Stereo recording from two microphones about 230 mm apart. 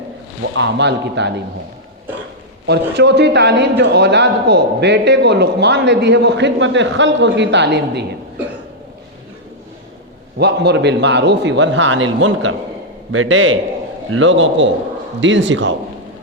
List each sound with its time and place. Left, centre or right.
0.5 s a man's voice: right
2.6 s a man's voice: right
10.3 s a man's voice: right